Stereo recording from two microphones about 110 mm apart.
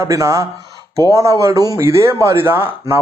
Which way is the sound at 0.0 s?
25° right (ahead or behind).